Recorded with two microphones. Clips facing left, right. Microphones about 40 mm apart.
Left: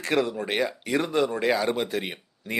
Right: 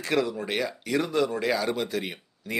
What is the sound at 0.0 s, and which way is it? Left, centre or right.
Speech, left.